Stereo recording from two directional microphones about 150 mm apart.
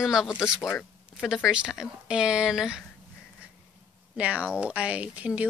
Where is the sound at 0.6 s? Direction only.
15° left (ahead or behind).